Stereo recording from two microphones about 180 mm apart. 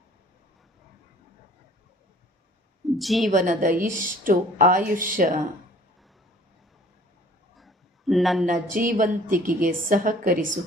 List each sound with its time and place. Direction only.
3.0 s a woman's voice: centre (ahead or behind)
3.3 s a woman's voice: 45° right (ahead or behind)
7.5 s a sound: centre (ahead or behind)
8.7 s a woman's voice: 50° right (ahead or behind)